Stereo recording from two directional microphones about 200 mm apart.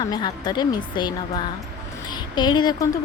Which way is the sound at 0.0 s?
20° left (ahead or behind).